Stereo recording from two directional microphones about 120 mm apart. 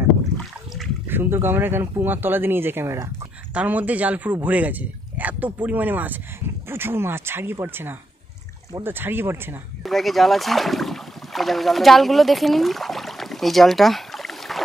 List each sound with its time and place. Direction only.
1.0 s a man's voice: 15° right (ahead or behind)
9.8 s speech: centre (ahead or behind)